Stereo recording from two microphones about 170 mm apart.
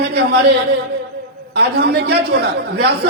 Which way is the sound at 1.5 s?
75° right (ahead or behind).